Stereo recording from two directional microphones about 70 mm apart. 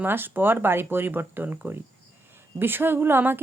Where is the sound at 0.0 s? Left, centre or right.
Right.